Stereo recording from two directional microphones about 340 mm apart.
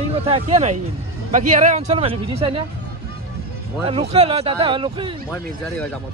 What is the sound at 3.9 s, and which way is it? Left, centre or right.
Speech, centre.